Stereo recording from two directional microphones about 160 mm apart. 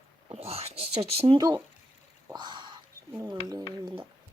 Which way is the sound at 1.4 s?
25° right (ahead or behind).